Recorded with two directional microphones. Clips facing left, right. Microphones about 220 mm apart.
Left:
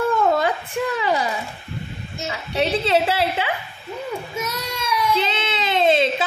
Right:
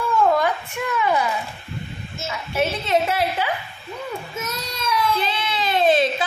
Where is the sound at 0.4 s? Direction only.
30° left (ahead or behind).